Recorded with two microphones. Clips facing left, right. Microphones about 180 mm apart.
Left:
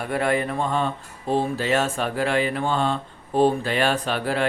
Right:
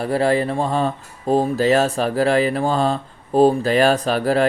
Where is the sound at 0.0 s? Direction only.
30° right (ahead or behind).